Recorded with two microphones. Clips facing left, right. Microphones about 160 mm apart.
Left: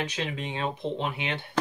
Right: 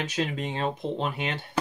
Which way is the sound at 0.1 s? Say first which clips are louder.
Right 3 dB; 45° right (ahead or behind).